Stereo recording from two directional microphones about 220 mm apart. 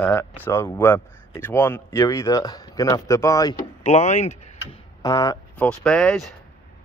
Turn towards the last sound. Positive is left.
turn(degrees=0)  # may be behind; listen again after turning